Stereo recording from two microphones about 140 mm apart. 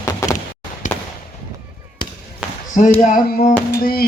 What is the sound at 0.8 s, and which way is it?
Fireworks, 65° left (ahead or behind).